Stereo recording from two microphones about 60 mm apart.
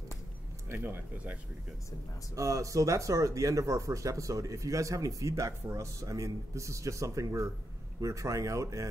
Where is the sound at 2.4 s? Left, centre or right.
Right.